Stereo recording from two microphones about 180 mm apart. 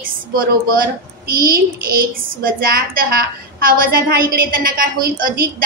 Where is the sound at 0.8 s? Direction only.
55° right (ahead or behind).